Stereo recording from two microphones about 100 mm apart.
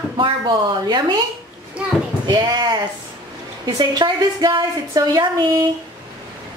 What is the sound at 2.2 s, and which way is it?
A woman's voice, 45° right (ahead or behind).